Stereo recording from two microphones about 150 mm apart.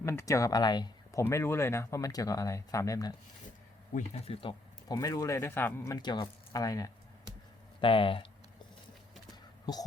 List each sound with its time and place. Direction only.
0.0 s speech: 20° left (ahead or behind)
1.2 s speech: 15° left (ahead or behind)
3.9 s speech: 40° left (ahead or behind)
4.9 s speech: 20° left (ahead or behind)
7.8 s speech: 35° left (ahead or behind)